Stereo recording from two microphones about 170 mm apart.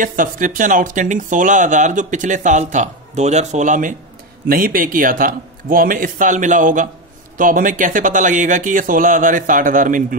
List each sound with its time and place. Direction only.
0.0 s speech: 50° right (ahead or behind)
4.5 s a man's voice: 55° right (ahead or behind)